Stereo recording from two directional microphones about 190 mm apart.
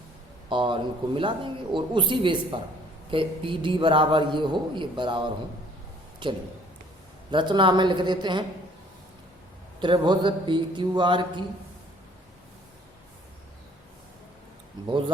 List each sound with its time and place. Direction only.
0.5 s a man's voice: 25° right (ahead or behind)
9.8 s a man's voice: 25° right (ahead or behind)